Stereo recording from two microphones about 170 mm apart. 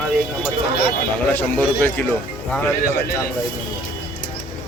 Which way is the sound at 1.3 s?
10° left (ahead or behind).